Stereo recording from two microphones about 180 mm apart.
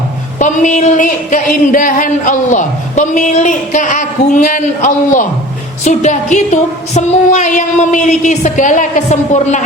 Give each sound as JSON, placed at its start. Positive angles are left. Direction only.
{"t": 0.3, "sound": "speech", "side_deg": 45}